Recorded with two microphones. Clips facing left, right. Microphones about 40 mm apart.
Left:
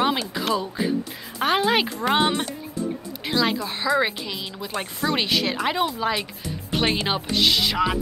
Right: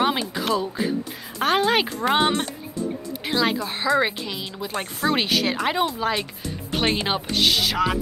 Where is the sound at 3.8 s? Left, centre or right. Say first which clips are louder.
Right 1 dB; centre.